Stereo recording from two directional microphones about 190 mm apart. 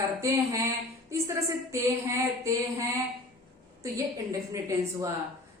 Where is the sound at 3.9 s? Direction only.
15° right (ahead or behind).